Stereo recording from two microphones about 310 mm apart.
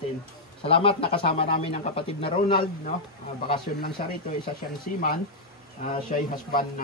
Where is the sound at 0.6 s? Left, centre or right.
Centre.